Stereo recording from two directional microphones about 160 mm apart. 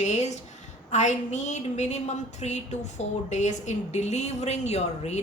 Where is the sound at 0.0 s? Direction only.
45° left (ahead or behind).